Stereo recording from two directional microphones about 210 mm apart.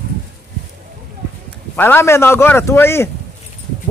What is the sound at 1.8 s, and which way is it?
A man's voice, 10° left (ahead or behind).